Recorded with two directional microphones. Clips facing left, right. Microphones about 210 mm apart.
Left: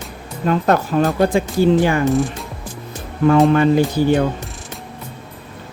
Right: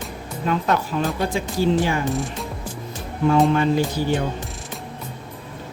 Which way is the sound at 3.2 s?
60° left (ahead or behind).